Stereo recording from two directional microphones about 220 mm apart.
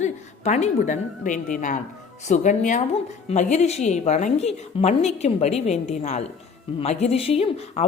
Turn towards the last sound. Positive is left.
turn(degrees=25)  # may be behind; listen again after turning